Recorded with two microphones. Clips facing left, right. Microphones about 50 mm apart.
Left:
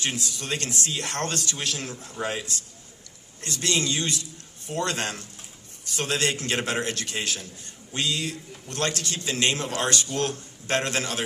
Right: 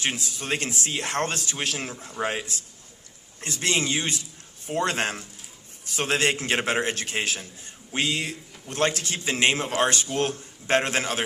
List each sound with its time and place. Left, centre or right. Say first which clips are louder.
0.3 s a man's voice: right 2 dB; right